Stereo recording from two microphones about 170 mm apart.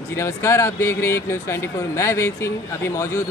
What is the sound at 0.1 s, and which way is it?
Speech, 15° left (ahead or behind).